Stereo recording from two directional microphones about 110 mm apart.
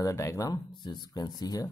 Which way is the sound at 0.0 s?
25° left (ahead or behind).